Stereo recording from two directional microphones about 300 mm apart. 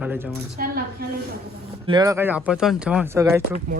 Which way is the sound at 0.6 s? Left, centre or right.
Right.